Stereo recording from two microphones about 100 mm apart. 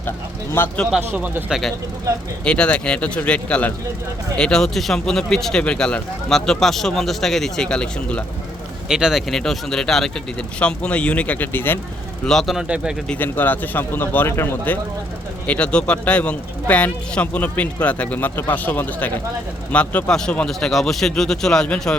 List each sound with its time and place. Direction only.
0.6 s speech: 20° left (ahead or behind)
0.9 s speech: 15° right (ahead or behind)
1.5 s speech: 5° right (ahead or behind)
2.4 s speech: 10° left (ahead or behind)
8.9 s speech: 5° right (ahead or behind); by 11.8 s 20° left (ahead or behind)
12.2 s speech: 5° left (ahead or behind)
12.6 s speech: 10° right (ahead or behind)
13.1 s speech: 20° left (ahead or behind)
15.4 s speech: 10° left (ahead or behind)